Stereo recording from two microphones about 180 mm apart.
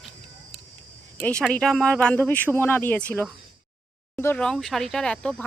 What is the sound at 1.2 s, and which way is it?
Speech, 5° left (ahead or behind).